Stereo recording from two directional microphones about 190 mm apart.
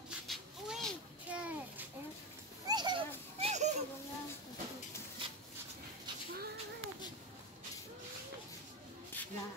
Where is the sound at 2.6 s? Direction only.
20° right (ahead or behind).